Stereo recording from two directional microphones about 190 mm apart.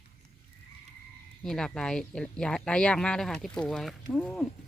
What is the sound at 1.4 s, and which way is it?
Speech, 5° left (ahead or behind).